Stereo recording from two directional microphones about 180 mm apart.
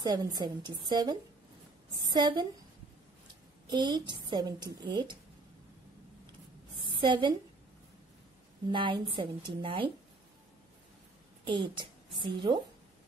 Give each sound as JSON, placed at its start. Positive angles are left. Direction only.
{"t": 0.0, "sound": "a woman's voice", "side_deg": -20}
{"t": 3.7, "sound": "a woman's voice", "side_deg": -25}
{"t": 6.8, "sound": "a sound", "side_deg": -25}
{"t": 8.6, "sound": "a woman's voice", "side_deg": -25}
{"t": 11.4, "sound": "a woman's voice", "side_deg": -25}